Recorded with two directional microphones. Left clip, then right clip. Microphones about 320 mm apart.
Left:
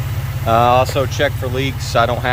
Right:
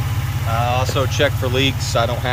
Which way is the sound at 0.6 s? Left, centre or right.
Centre.